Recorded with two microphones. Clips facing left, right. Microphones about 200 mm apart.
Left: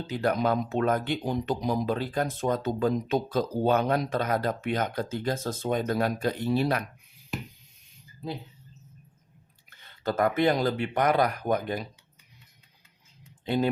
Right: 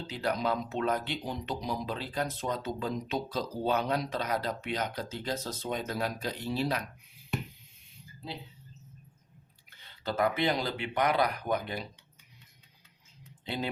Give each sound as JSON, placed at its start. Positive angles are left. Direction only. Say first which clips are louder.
{"t": 0.1, "sound": "speech", "louder": "left 5 dB", "side_deg": 50}
{"t": 9.6, "sound": "speech", "louder": "left 6 dB", "side_deg": 50}
{"t": 13.4, "sound": "speech", "louder": "left 9 dB", "side_deg": 50}